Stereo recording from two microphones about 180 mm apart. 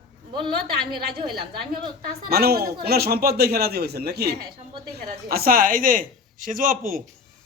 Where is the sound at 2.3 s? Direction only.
60° right (ahead or behind).